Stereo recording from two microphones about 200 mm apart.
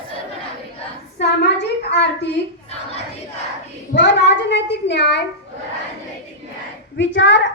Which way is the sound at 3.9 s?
60° left (ahead or behind).